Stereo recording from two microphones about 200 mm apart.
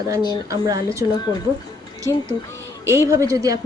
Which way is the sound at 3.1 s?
15° right (ahead or behind).